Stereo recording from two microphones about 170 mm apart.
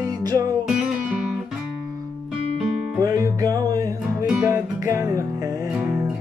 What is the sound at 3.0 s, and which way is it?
Music, 20° right (ahead or behind).